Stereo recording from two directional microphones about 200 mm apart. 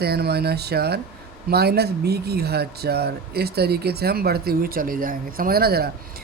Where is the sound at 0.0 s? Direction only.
55° right (ahead or behind).